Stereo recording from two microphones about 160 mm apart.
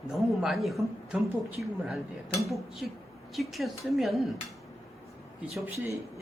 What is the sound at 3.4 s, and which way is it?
Speech, centre (ahead or behind).